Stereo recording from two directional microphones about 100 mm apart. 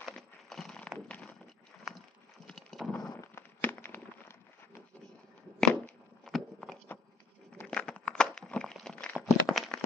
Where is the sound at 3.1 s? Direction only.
30° left (ahead or behind).